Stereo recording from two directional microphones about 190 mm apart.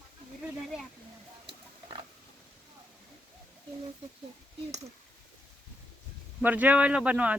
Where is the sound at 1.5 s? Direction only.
25° right (ahead or behind).